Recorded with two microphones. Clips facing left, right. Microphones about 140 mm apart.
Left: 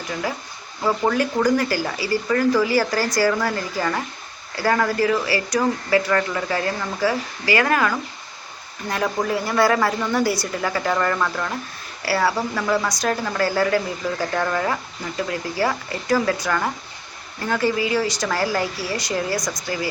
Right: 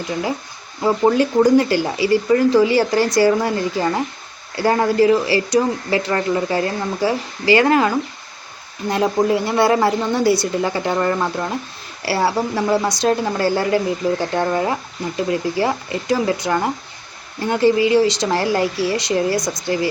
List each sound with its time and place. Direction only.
0.9 s speech: 25° right (ahead or behind)